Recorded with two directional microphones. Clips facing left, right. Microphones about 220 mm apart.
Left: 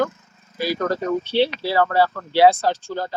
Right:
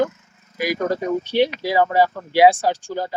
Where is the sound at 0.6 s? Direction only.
15° right (ahead or behind).